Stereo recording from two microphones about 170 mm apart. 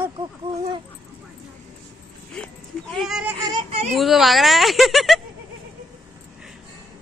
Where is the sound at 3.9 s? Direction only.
Centre (ahead or behind).